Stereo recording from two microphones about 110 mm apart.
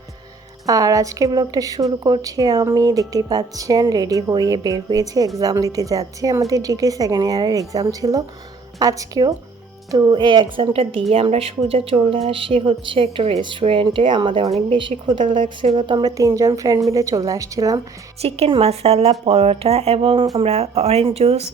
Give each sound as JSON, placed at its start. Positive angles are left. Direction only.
{"t": 0.6, "sound": "a woman's voice", "side_deg": -30}
{"t": 10.7, "sound": "speech", "side_deg": -65}
{"t": 13.4, "sound": "speech", "side_deg": -50}
{"t": 16.1, "sound": "a woman's voice", "side_deg": -30}
{"t": 18.2, "sound": "speech", "side_deg": -65}
{"t": 20.3, "sound": "speech", "side_deg": -70}